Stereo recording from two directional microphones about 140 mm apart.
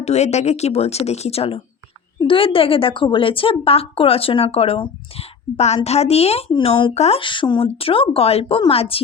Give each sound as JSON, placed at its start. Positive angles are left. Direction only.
{"t": 0.0, "sound": "a woman's voice", "side_deg": 50}
{"t": 6.9, "sound": "speech", "side_deg": 50}
{"t": 7.2, "sound": "a woman's voice", "side_deg": 35}